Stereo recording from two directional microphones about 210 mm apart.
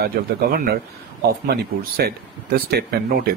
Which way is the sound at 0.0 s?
45° right (ahead or behind).